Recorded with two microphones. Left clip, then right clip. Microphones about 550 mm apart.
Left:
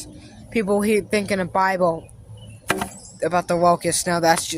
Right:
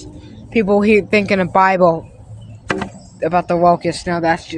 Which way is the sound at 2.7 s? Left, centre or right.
Left.